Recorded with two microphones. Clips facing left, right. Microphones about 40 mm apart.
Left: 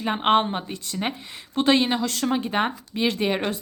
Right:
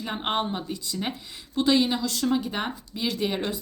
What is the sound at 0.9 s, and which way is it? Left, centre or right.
Speech, left.